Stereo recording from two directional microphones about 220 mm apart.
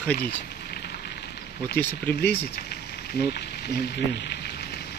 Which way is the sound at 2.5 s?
45° left (ahead or behind).